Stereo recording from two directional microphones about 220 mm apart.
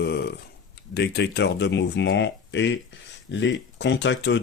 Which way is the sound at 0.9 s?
50° left (ahead or behind).